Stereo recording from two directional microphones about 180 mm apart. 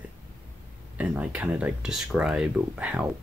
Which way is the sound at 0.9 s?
5° right (ahead or behind).